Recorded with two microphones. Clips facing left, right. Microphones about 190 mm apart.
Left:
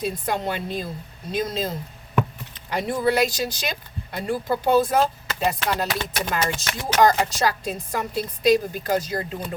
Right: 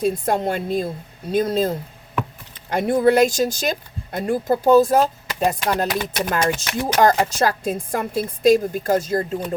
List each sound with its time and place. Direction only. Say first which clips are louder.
0.0 s speech: right 6 dB; 50° right (ahead or behind)
5.9 s speech: right 4 dB; 10° right (ahead or behind)
6.3 s speech: right 5 dB; 50° right (ahead or behind)